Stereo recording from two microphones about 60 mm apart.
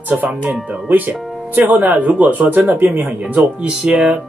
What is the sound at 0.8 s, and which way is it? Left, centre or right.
Speech, right.